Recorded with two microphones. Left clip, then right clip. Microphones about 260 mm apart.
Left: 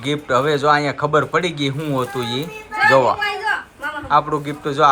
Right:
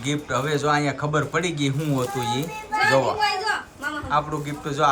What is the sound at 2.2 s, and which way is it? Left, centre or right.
Speech, right.